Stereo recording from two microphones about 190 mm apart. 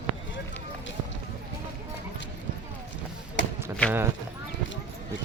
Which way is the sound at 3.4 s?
70° left (ahead or behind).